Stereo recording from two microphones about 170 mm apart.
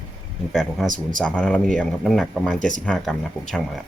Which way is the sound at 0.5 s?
Centre (ahead or behind).